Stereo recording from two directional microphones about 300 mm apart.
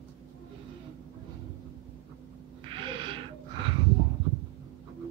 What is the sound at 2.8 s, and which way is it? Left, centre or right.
Owl, centre.